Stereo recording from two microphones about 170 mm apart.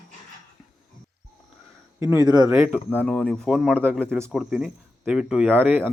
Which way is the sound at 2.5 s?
10° right (ahead or behind).